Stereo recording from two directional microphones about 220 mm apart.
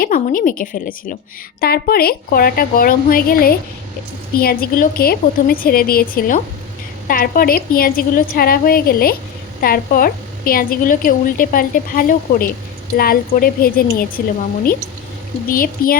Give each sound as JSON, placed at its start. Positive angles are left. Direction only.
{"t": 0.0, "sound": "a woman's voice", "side_deg": 40}
{"t": 15.4, "sound": "a woman's voice", "side_deg": 40}